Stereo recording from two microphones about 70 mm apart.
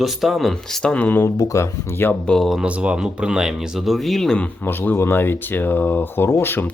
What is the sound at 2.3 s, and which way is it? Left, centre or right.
Speech, centre.